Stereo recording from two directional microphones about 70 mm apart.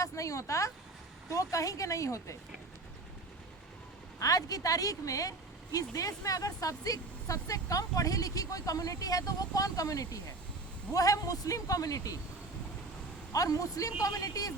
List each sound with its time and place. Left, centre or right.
0.0 s speech: left
4.2 s speech: left
13.3 s speech: left